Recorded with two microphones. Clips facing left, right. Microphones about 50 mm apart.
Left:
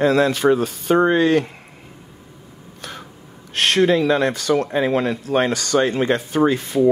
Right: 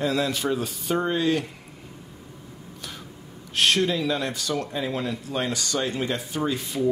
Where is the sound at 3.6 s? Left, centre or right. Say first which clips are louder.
Left 6 dB; left.